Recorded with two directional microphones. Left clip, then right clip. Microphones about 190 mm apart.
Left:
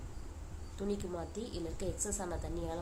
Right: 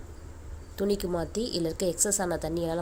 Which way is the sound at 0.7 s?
40° right (ahead or behind).